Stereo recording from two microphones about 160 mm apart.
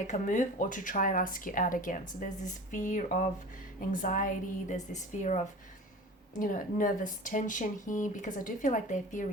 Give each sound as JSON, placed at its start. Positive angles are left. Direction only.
{"t": 0.1, "sound": "speech", "side_deg": 50}